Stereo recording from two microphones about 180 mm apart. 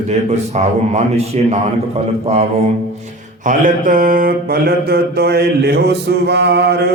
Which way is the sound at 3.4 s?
45° right (ahead or behind).